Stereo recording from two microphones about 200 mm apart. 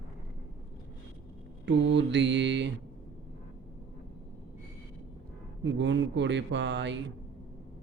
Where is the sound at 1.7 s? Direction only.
60° right (ahead or behind).